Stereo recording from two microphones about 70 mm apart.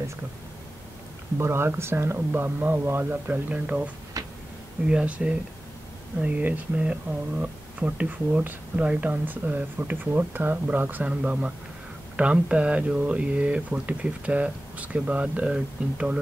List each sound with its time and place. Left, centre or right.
1.4 s speech: right; by 3.9 s centre
4.2 s a sound: right
4.8 s speech: centre